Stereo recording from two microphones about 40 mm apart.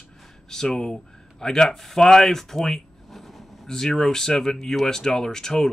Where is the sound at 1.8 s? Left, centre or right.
Centre.